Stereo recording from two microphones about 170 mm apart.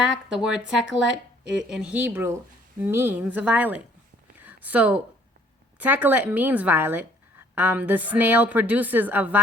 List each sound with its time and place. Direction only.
0.3 s a woman's voice: 5° right (ahead or behind)
4.4 s a sound: 10° right (ahead or behind)
5.8 s a woman's voice: 10° right (ahead or behind)